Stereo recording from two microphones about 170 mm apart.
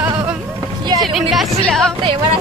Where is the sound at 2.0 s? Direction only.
25° right (ahead or behind).